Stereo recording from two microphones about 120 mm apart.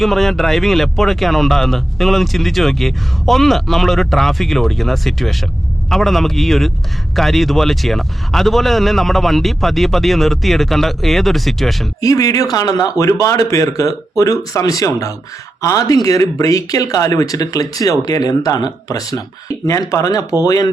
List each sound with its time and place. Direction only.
0.0 s speech: centre (ahead or behind)
11.9 s speech: 30° left (ahead or behind)